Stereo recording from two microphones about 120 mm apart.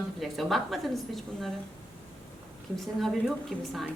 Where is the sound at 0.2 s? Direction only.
Centre (ahead or behind).